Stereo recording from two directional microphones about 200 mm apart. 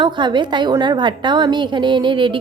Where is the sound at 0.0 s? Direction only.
20° right (ahead or behind).